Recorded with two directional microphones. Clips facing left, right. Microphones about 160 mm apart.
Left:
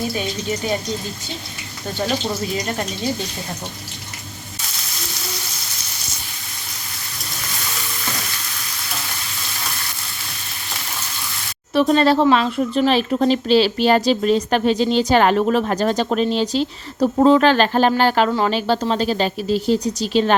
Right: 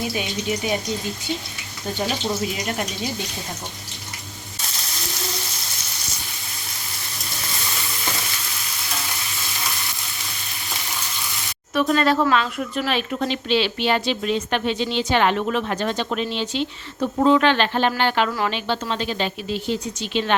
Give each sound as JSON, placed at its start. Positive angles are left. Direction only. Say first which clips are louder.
{"t": 11.7, "sound": "speech", "louder": "left 4 dB", "side_deg": 30}